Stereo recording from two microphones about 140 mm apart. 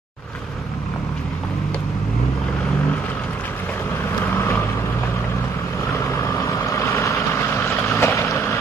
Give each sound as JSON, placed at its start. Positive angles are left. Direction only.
{"t": 4.3, "sound": "vehicle", "side_deg": 15}
{"t": 6.0, "sound": "vehicle", "side_deg": 20}